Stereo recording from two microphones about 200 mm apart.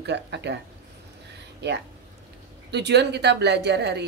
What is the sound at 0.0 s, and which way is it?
Speech, 60° right (ahead or behind).